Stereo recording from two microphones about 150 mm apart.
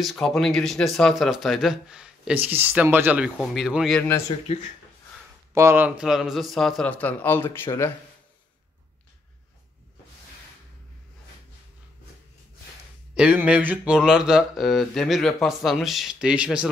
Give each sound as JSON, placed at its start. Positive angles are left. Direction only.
{"t": 0.0, "sound": "speech", "side_deg": 0}
{"t": 4.5, "sound": "speech", "side_deg": 40}
{"t": 5.5, "sound": "speech", "side_deg": -15}
{"t": 13.1, "sound": "speech", "side_deg": -10}